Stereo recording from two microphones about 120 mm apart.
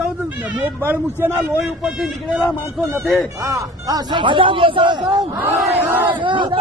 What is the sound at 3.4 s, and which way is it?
Speech, 30° right (ahead or behind).